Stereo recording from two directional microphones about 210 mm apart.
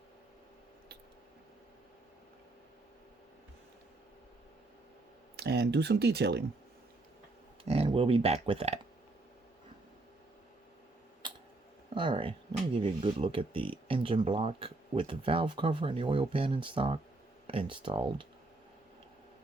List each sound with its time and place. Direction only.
5.4 s speech: 50° right (ahead or behind)
7.6 s speech: 30° right (ahead or behind)
11.9 s speech: 25° right (ahead or behind)